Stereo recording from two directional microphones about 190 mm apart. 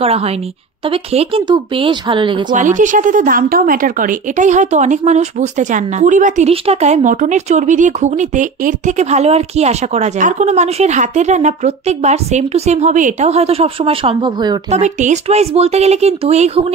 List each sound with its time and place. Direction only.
0.0 s a woman's voice: 30° right (ahead or behind)
2.5 s a woman's voice: 40° right (ahead or behind); by 14.6 s 25° right (ahead or behind)
14.7 s a woman's voice: 40° right (ahead or behind)